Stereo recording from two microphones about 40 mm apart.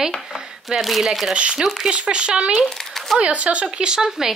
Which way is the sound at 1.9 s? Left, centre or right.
Right.